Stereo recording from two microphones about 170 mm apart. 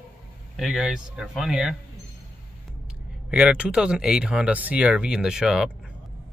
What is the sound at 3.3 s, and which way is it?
Speech, 5° right (ahead or behind).